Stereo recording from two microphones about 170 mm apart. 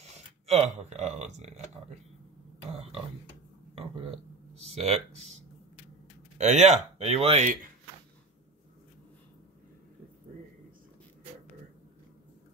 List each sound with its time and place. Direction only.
0.5 s speech: 40° right (ahead or behind)
4.6 s a sound: 40° right (ahead or behind)
6.3 s speech: 45° right (ahead or behind)